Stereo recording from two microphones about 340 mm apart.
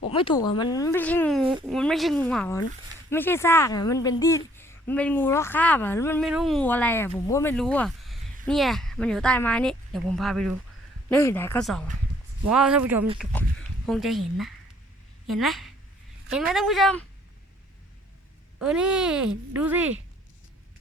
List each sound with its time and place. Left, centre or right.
0.0 s a woman's voice: centre
18.6 s a woman's voice: centre